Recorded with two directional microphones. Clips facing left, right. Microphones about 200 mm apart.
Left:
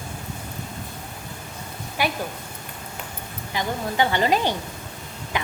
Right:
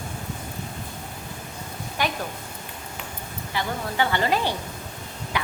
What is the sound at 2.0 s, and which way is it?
Speech, 10° left (ahead or behind).